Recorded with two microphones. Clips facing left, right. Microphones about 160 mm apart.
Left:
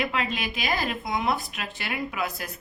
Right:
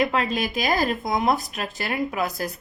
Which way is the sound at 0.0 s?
40° right (ahead or behind).